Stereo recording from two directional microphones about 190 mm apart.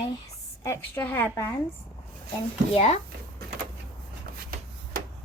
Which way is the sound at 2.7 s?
35° left (ahead or behind).